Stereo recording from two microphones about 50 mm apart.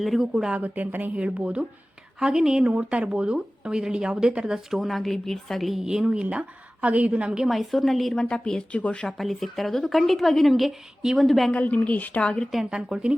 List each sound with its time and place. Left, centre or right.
0.0 s speech: centre
0.5 s a woman's voice: right
1.1 s speech: right
4.8 s a woman's voice: centre
5.8 s speech: centre
6.3 s speech: right
7.4 s a woman's voice: centre
8.1 s a woman's voice: centre
8.7 s a woman's voice: left
9.0 s a woman's voice: centre
11.3 s a woman's voice: centre
11.5 s a woman's voice: left
12.2 s a woman's voice: centre
12.7 s speech: centre